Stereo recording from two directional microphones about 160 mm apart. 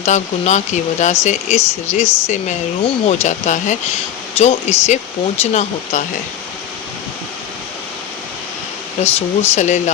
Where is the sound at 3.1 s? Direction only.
45° left (ahead or behind).